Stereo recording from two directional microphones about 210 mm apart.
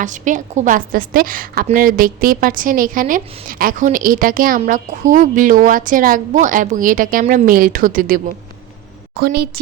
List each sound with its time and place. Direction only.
0.0 s a woman's voice: 35° right (ahead or behind)